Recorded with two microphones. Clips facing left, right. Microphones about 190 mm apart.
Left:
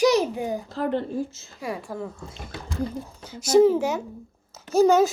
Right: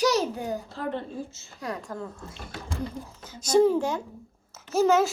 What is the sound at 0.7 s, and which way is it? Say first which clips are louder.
Speech: left 6 dB; 35° left (ahead or behind).